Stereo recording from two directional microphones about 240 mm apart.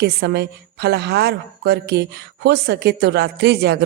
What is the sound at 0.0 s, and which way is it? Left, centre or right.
Speech, right.